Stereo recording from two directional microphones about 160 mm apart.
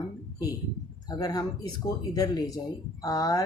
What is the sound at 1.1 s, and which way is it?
Speech, 25° left (ahead or behind).